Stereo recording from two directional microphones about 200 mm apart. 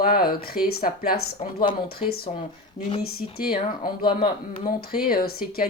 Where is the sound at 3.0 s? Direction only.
50° left (ahead or behind).